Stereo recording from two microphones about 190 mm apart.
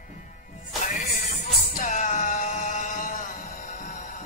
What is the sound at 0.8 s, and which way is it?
Music, 40° left (ahead or behind).